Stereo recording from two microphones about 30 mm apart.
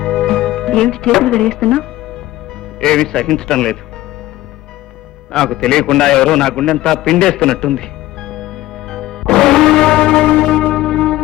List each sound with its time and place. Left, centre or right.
0.0 s music: centre
1.3 s a man's voice: left
5.3 s a man's voice: centre
7.4 s music: left
10.7 s church bell: centre